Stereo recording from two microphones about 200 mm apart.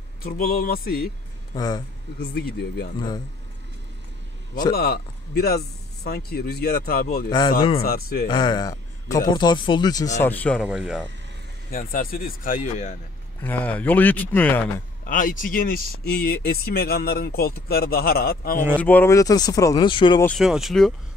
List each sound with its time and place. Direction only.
0.2 s speech: 45° left (ahead or behind)
1.5 s speech: 20° left (ahead or behind)
2.3 s speech: 50° left (ahead or behind)
4.7 s speech: 50° left (ahead or behind)
7.2 s speech: 20° left (ahead or behind)
7.8 s speech: 50° left (ahead or behind)
8.3 s a man's voice: 20° left (ahead or behind)
10.2 s speech: 10° left (ahead or behind)
10.6 s speech: 5° right (ahead or behind)
11.7 s speech: 45° left (ahead or behind)
13.4 s speech: 10° left (ahead or behind)
15.0 s speech: 40° left (ahead or behind)
18.8 s speech: 10° left (ahead or behind)
20.2 s speech: centre (ahead or behind)